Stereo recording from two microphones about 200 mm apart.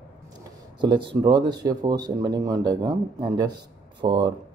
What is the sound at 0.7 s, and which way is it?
Speech, 25° right (ahead or behind).